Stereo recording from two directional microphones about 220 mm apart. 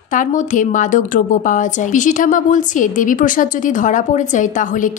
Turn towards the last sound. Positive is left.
turn(degrees=35)  # may be behind; listen again after turning